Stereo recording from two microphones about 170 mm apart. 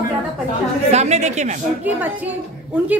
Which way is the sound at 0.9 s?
40° right (ahead or behind).